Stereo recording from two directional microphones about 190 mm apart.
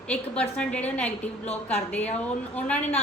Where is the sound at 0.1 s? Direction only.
5° left (ahead or behind).